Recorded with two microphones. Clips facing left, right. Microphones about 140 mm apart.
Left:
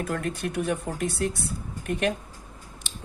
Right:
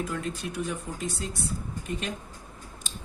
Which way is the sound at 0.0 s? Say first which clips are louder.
Left 3 dB; 60° left (ahead or behind).